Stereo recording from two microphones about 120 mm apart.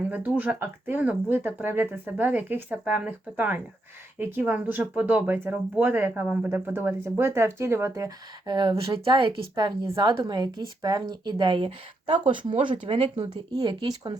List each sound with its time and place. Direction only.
0.1 s speech: 15° right (ahead or behind)
8.4 s a woman's voice: 40° right (ahead or behind)
12.0 s speech: 70° right (ahead or behind)
12.6 s speech: 60° right (ahead or behind)
13.3 s a woman's voice: 35° right (ahead or behind)